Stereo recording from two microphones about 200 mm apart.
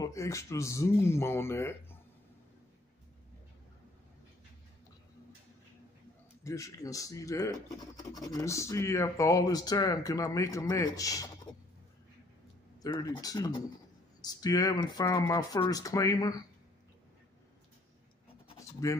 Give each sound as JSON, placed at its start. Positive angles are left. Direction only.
{"t": 0.0, "sound": "speech", "side_deg": 15}
{"t": 6.4, "sound": "speech", "side_deg": 15}
{"t": 12.8, "sound": "speech", "side_deg": 20}
{"t": 18.8, "sound": "speech", "side_deg": 15}